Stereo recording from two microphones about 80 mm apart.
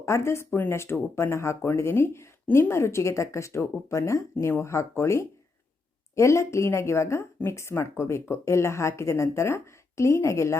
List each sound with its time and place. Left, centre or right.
0.0 s speech: left